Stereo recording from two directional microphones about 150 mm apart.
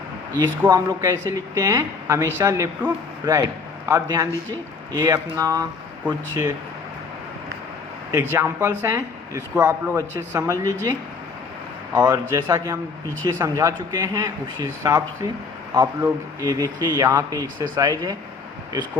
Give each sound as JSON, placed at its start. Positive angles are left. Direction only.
{"t": 0.7, "sound": "speech", "side_deg": -20}
{"t": 8.1, "sound": "speech", "side_deg": -15}
{"t": 11.9, "sound": "speech", "side_deg": -25}